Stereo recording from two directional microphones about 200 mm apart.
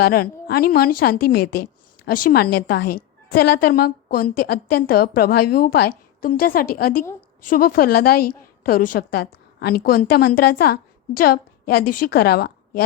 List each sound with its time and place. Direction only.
0.0 s a woman's voice: 50° left (ahead or behind)